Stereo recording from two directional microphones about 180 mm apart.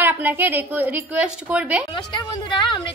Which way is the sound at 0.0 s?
10° right (ahead or behind).